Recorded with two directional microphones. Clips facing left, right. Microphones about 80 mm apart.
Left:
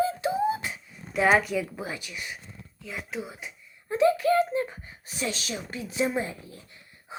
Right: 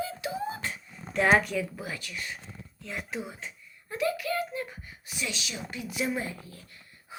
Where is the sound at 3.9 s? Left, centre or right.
Left.